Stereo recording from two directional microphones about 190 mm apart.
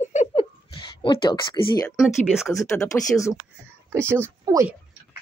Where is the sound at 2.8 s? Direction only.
15° left (ahead or behind).